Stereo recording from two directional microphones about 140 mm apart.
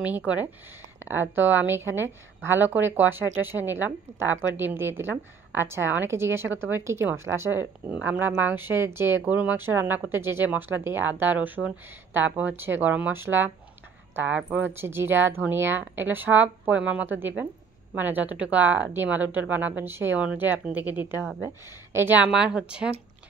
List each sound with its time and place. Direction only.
1.0 s a woman's voice: 15° right (ahead or behind)